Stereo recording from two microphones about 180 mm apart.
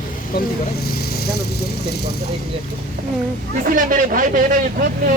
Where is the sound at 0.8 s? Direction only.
60° left (ahead or behind).